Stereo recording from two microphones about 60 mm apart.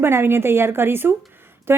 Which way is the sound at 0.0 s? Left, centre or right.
Right.